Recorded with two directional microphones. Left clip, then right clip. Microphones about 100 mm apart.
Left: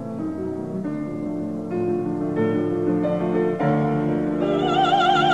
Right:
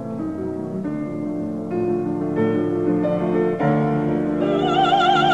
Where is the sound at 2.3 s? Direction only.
25° right (ahead or behind).